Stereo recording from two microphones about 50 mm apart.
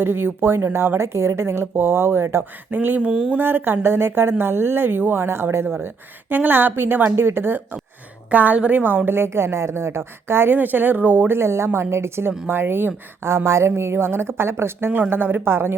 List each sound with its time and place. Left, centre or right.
0.0 s speech: right
0.9 s a woman's voice: right
2.7 s a woman's voice: right
3.1 s speech: centre
3.3 s speech: right
6.3 s speech: right
8.3 s a woman's voice: right
9.0 s speech: right
11.3 s a woman's voice: right
12.5 s a woman's voice: right